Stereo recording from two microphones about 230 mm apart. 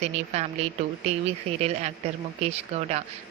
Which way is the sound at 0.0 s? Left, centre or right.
Right.